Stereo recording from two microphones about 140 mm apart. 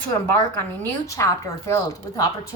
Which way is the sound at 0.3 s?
15° left (ahead or behind).